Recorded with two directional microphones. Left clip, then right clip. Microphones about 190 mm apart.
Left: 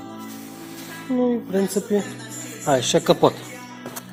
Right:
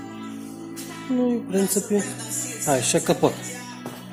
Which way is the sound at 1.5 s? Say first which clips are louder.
Left 1 dB; 5° left (ahead or behind).